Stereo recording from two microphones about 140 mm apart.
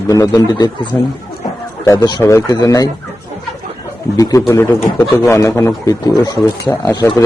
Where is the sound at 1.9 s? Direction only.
25° left (ahead or behind).